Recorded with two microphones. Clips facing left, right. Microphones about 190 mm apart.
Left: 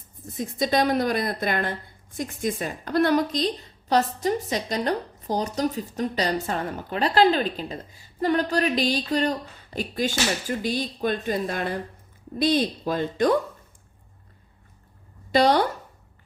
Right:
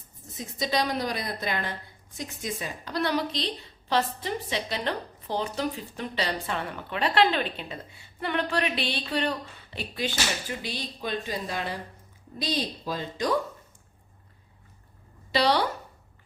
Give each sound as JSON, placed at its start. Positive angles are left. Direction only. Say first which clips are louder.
{"t": 0.3, "sound": "a woman's voice", "louder": "left 5 dB", "side_deg": 50}
{"t": 15.3, "sound": "a woman's voice", "louder": "left 5 dB", "side_deg": 45}